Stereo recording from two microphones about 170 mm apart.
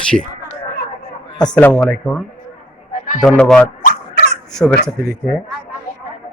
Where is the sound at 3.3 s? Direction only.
5° left (ahead or behind).